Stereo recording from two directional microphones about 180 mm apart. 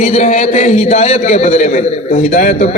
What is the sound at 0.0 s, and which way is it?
A man's voice, 40° left (ahead or behind).